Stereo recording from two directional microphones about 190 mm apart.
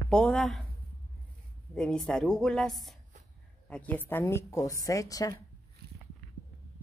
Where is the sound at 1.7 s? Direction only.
5° left (ahead or behind); by 5.3 s 20° left (ahead or behind).